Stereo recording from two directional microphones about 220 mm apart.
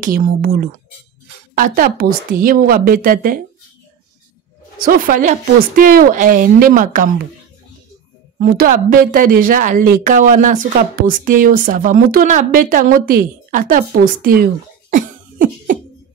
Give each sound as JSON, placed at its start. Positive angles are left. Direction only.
{"t": 0.0, "sound": "a woman's voice", "side_deg": -40}
{"t": 4.8, "sound": "a woman's voice", "side_deg": -40}
{"t": 8.4, "sound": "a woman's voice", "side_deg": -40}